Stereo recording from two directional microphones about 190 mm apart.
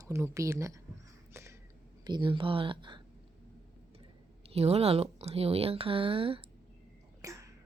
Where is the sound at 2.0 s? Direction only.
25° right (ahead or behind).